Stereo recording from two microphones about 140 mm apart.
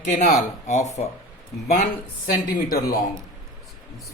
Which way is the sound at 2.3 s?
90° left.